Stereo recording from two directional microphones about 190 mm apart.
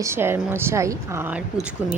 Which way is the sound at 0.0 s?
15° right (ahead or behind).